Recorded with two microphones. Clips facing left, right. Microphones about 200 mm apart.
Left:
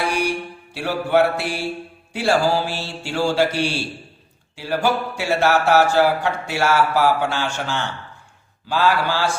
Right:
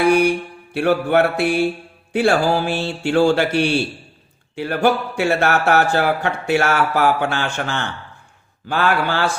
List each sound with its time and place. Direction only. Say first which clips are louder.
0.1 s mantra: right 7 dB; 55° right (ahead or behind)
2.1 s speech: right 2 dB; 55° right (ahead or behind)